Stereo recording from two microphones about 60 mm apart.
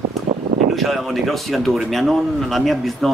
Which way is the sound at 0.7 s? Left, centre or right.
Centre.